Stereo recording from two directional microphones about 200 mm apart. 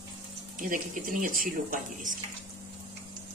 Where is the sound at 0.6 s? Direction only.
40° right (ahead or behind).